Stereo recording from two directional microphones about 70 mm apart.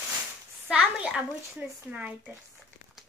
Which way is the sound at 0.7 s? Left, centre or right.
Centre.